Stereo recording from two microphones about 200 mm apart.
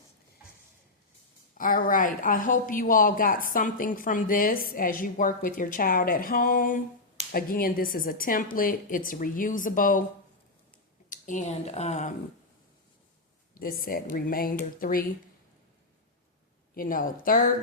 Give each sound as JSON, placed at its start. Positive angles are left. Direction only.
{"t": 1.5, "sound": "a woman's voice", "side_deg": 45}
{"t": 11.1, "sound": "speech", "side_deg": 40}
{"t": 13.6, "sound": "a woman's voice", "side_deg": 45}
{"t": 16.7, "sound": "a woman's voice", "side_deg": 45}